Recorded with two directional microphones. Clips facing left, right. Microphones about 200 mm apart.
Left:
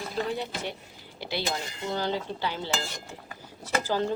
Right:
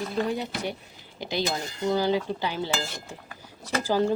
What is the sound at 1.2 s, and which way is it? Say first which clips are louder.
Speech: right 3 dB; 15° right (ahead or behind).